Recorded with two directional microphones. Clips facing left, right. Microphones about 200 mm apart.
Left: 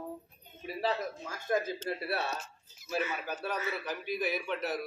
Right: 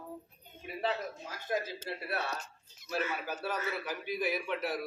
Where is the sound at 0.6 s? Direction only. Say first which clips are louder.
Left 2 dB; 40° left (ahead or behind).